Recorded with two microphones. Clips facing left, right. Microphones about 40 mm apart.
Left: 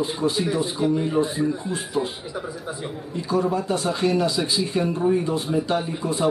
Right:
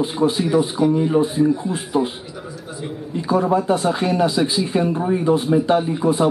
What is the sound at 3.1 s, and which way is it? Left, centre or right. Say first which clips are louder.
Speech: right 5 dB; centre.